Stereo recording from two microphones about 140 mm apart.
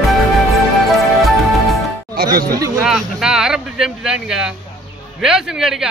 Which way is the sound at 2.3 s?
90° right.